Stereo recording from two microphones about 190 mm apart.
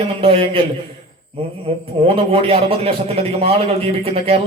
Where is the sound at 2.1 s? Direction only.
30° right (ahead or behind).